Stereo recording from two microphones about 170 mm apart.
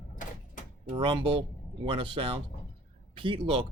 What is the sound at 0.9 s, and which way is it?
Speech, 30° right (ahead or behind).